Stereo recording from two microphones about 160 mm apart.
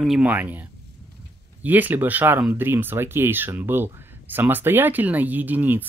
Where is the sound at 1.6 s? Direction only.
10° right (ahead or behind).